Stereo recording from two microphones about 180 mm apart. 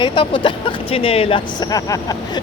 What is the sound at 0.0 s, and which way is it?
Speech, 25° left (ahead or behind).